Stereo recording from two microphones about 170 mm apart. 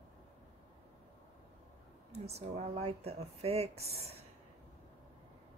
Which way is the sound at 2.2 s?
40° right (ahead or behind).